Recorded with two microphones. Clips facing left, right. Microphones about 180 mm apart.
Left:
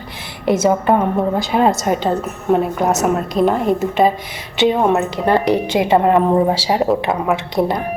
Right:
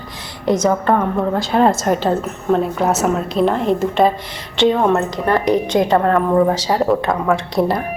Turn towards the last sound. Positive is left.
turn(degrees=0)  # may be behind; listen again after turning